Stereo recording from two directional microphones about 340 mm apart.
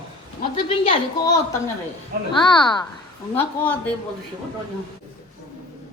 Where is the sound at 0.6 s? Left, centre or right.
Centre.